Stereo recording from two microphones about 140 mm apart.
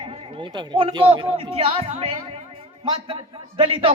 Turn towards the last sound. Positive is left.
turn(degrees=-40)  # may be behind; listen again after turning